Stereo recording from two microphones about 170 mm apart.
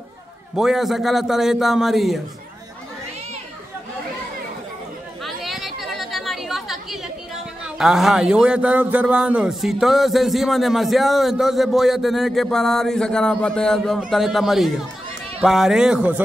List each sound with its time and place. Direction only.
0.6 s a man's voice: centre (ahead or behind)
5.2 s chatter: centre (ahead or behind)
7.6 s a man's voice: centre (ahead or behind)